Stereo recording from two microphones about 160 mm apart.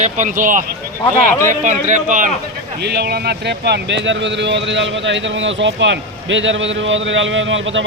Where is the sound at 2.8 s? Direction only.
90° right.